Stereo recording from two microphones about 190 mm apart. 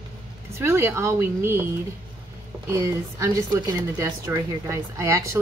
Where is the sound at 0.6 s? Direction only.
10° right (ahead or behind).